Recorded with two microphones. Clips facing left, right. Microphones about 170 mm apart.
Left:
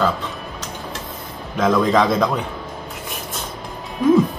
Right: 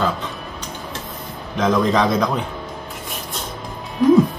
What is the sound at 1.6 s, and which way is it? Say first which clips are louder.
Speech: left 1 dB; 5° left (ahead or behind).